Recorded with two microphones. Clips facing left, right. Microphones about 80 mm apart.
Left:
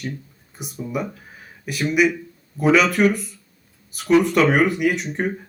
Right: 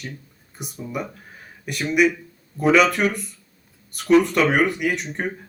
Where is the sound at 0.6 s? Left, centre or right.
Centre.